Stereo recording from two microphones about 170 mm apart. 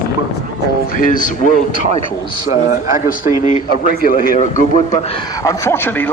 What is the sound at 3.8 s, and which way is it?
Speech, 55° left (ahead or behind).